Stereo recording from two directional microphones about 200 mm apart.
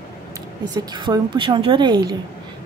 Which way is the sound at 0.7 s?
20° right (ahead or behind).